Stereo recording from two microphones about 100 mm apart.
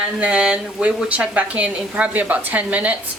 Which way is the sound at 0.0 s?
15° right (ahead or behind).